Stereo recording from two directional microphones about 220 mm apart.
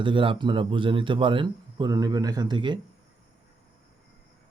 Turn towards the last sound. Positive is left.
turn(degrees=-20)  # may be behind; listen again after turning